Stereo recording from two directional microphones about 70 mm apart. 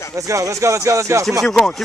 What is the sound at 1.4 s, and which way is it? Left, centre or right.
Speech, centre.